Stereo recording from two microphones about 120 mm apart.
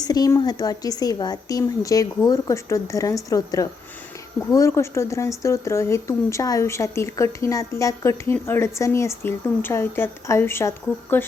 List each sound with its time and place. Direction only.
0.0 s speech: 35° left (ahead or behind)